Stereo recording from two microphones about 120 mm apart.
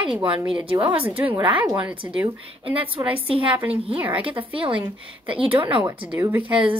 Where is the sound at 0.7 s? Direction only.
50° right (ahead or behind).